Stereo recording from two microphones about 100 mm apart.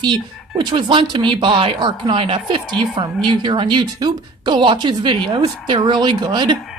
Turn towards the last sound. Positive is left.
turn(degrees=-50)  # may be behind; listen again after turning